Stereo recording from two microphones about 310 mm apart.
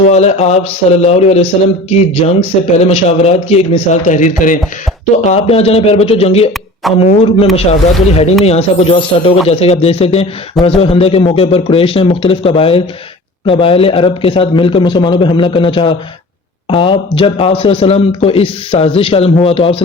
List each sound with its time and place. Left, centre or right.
0.1 s a man's voice: left